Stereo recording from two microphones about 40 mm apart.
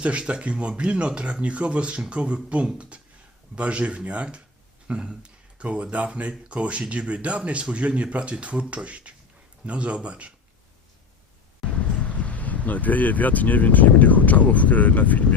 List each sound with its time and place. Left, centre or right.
0.0 s speech: right
11.7 s speech: left